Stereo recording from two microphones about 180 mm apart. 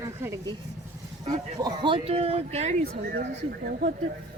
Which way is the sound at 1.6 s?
25° right (ahead or behind).